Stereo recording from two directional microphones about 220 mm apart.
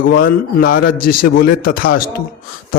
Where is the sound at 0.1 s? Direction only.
40° left (ahead or behind).